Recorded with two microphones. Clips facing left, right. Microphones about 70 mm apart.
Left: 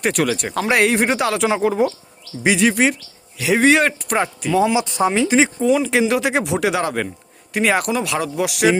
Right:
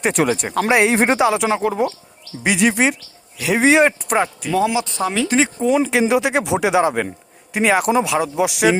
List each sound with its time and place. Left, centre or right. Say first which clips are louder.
0.1 s speech: right 2 dB; right
0.9 s speech: right 2 dB; right
1.2 s speech: right 1 dB; centre
3.6 s speech: right 2 dB; centre
4.2 s speech: left 2 dB; centre
4.6 s speech: left 3 dB; centre
5.5 s speech: even; centre